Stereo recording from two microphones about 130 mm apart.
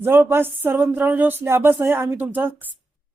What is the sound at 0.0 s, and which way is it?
Speech, 15° right (ahead or behind).